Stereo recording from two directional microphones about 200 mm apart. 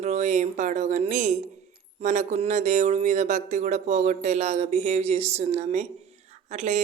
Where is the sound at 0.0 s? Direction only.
35° right (ahead or behind).